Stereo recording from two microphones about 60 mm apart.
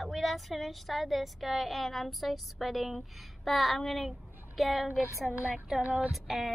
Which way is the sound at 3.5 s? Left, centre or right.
Centre.